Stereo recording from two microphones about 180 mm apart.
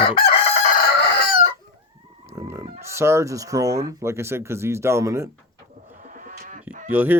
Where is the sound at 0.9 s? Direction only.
65° left (ahead or behind).